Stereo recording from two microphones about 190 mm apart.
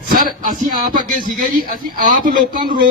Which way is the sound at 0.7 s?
50° right (ahead or behind).